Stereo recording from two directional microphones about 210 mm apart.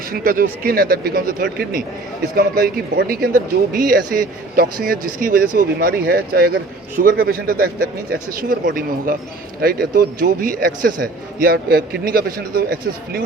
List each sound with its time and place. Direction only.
0.1 s speech: 45° right (ahead or behind)